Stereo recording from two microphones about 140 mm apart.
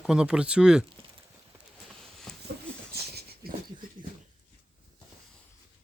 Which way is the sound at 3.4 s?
90° right.